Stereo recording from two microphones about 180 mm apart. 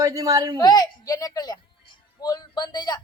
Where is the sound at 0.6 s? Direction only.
20° left (ahead or behind).